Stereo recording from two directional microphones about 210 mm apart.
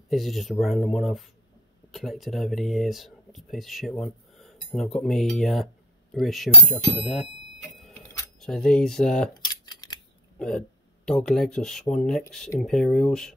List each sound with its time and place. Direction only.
0.1 s speech: centre (ahead or behind)
7.9 s a sound: 15° left (ahead or behind)
8.4 s speech: 5° left (ahead or behind)
9.3 s scissors: 20° left (ahead or behind)
11.1 s speech: 5° left (ahead or behind)